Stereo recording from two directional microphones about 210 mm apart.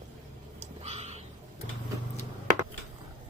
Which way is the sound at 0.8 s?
30° right (ahead or behind).